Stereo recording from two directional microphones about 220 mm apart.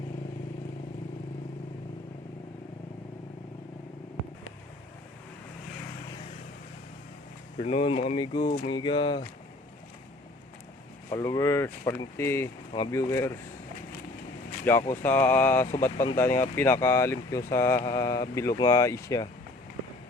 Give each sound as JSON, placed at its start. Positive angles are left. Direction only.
{"t": 7.6, "sound": "speech", "side_deg": 30}
{"t": 11.1, "sound": "speech", "side_deg": 15}
{"t": 14.6, "sound": "speech", "side_deg": 10}